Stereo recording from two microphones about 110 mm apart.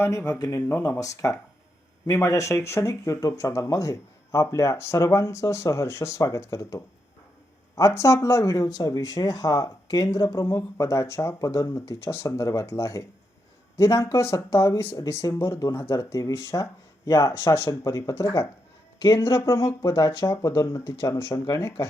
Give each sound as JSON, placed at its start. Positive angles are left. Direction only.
{"t": 0.0, "sound": "speech", "side_deg": 25}